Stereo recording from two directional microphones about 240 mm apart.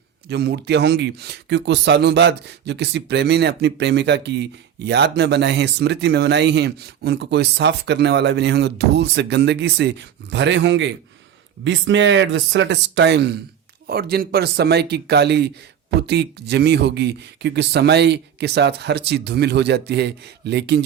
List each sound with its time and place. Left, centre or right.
0.3 s speech: right